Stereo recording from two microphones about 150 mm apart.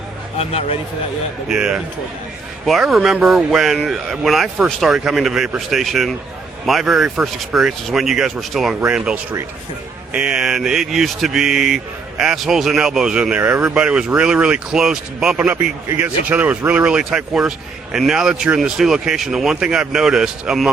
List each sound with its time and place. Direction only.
0.3 s speech: 40° left (ahead or behind)
1.5 s speech: 5° right (ahead or behind)